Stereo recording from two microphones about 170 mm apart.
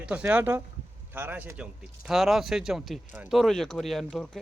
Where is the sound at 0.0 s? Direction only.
10° right (ahead or behind).